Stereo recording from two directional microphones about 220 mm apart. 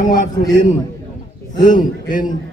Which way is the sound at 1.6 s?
35° left (ahead or behind).